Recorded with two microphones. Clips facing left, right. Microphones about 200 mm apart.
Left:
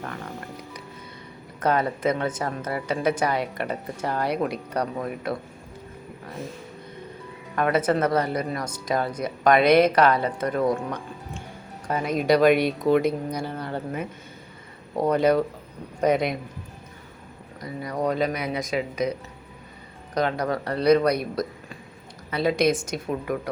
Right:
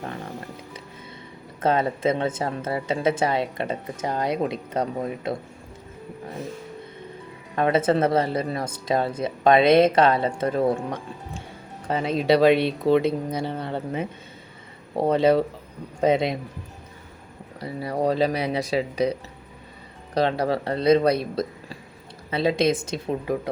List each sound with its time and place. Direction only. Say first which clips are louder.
1.6 s speech: right 1 dB; 25° right (ahead or behind)
7.5 s speech: right 2 dB; 25° right (ahead or behind)
17.6 s speech: right 2 dB; 30° right (ahead or behind)
20.1 s speech: right 2 dB; 30° right (ahead or behind)